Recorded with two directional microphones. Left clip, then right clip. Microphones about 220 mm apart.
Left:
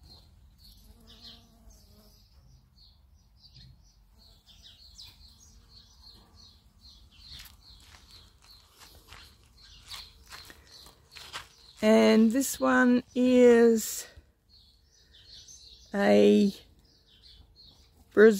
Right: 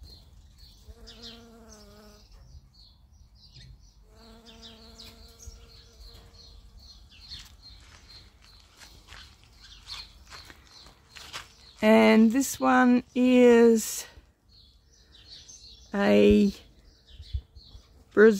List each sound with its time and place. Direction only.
9.1 s dog: 15° left (ahead or behind)
11.1 s walk: 15° left (ahead or behind)
11.8 s speech: 5° right (ahead or behind)
15.9 s speech: centre (ahead or behind)
18.1 s speech: 5° left (ahead or behind)